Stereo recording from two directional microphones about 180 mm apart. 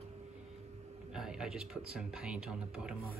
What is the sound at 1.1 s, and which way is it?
Speech, 5° right (ahead or behind).